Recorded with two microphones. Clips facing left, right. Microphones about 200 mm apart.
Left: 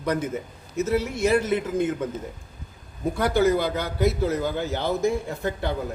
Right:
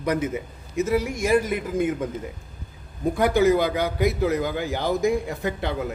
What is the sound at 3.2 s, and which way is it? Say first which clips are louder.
A man's voice: right 2 dB; 15° right (ahead or behind).